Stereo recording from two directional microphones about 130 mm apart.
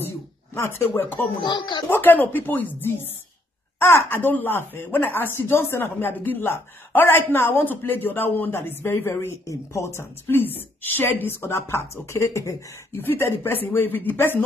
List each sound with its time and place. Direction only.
0.6 s speech: 20° left (ahead or behind)
1.4 s speech: 40° left (ahead or behind)
1.9 s speech: 15° left (ahead or behind)